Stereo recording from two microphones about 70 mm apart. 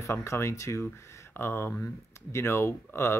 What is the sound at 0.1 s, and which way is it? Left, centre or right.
Speech, left.